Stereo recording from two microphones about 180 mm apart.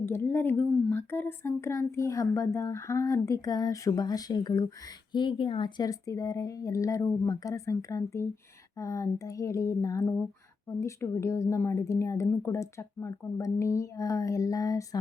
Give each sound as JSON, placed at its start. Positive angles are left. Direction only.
{"t": 0.0, "sound": "speech", "side_deg": 15}